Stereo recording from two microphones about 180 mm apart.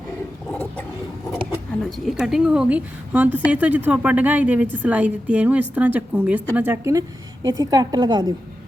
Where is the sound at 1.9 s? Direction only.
Centre (ahead or behind).